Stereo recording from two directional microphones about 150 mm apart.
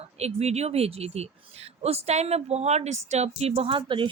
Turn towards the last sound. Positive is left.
turn(degrees=-35)  # may be behind; listen again after turning